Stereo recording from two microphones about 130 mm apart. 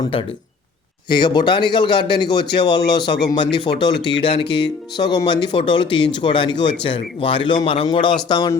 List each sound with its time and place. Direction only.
1.1 s a man's voice: 35° left (ahead or behind)